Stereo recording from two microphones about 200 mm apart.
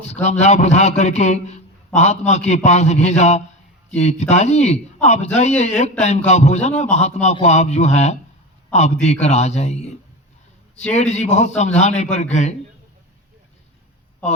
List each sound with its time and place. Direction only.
0.1 s a man's voice: 35° left (ahead or behind)
10.8 s a man's voice: 35° left (ahead or behind)